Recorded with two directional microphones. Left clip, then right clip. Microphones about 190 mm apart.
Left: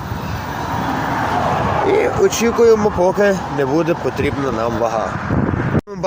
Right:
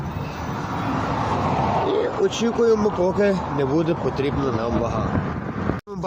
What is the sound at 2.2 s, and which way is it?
Speech, 30° left (ahead or behind).